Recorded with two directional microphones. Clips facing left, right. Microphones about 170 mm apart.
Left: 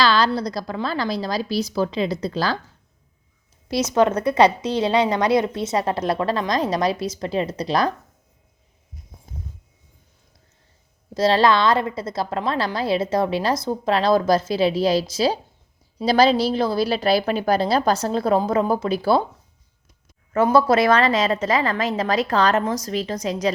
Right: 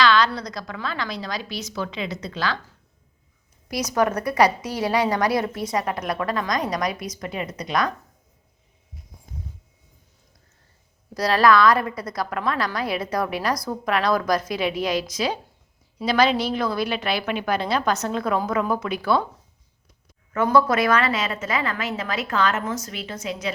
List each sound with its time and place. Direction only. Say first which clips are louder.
0.0 s a woman's voice: left 1 dB; 35° left (ahead or behind)
3.7 s a woman's voice: left 4 dB; 25° left (ahead or behind)
11.1 s a woman's voice: left 1 dB; 25° left (ahead or behind)
20.3 s a woman's voice: left 3 dB; 25° left (ahead or behind)